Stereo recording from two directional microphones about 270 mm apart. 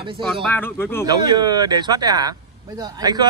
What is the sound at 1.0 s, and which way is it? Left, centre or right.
A man's voice, centre.